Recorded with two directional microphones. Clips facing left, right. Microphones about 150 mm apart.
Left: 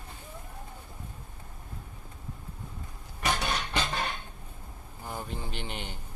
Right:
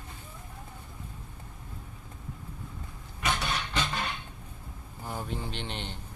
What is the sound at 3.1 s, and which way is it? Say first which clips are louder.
Music: left 1 dB; 40° left (ahead or behind).